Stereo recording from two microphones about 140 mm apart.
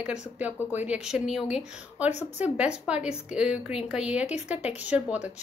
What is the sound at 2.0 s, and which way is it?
Speech, 55° left (ahead or behind).